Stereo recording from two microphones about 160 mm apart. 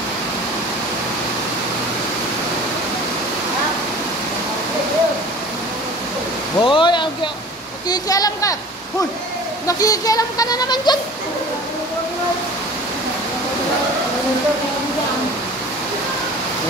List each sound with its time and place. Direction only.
6.6 s a sound: 30° left (ahead or behind)
7.9 s speech: 20° left (ahead or behind)
9.7 s speech: 20° left (ahead or behind)